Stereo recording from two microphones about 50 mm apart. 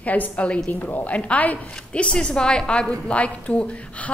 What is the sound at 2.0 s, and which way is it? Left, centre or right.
A woman's voice, centre.